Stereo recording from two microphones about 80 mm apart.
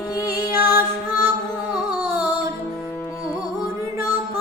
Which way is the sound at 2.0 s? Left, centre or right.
Right.